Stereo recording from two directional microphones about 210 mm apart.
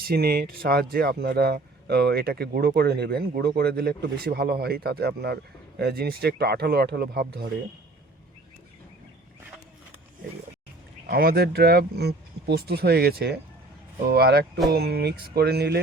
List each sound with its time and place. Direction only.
0.0 s speech: 45° right (ahead or behind)
11.0 s speech: 45° right (ahead or behind)